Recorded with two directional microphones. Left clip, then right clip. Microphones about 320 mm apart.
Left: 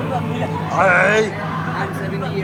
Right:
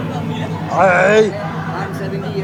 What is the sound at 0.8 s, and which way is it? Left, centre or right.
Speech, centre.